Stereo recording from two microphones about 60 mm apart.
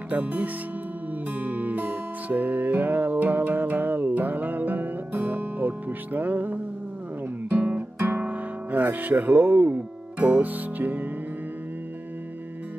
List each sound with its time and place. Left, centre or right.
0.1 s speech: right
1.3 s music: right
7.4 s guitar: right
9.8 s music: right